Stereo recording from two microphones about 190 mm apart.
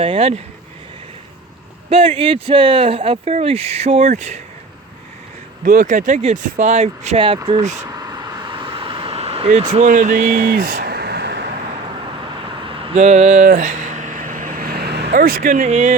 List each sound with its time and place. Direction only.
0.0 s speech: 30° right (ahead or behind)
1.9 s speech: 30° right (ahead or behind)
5.6 s speech: 45° right (ahead or behind); by 7.6 s 25° right (ahead or behind)
7.7 s a sound: 20° right (ahead or behind); by 11.4 s 60° right (ahead or behind)
12.6 s a sound: 30° right (ahead or behind); by 15.0 s 55° right (ahead or behind)
15.1 s speech: 50° right (ahead or behind)